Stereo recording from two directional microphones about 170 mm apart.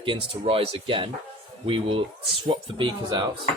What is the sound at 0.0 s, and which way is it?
Speech, 30° right (ahead or behind).